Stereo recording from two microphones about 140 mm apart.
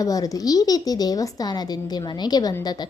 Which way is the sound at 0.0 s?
25° left (ahead or behind).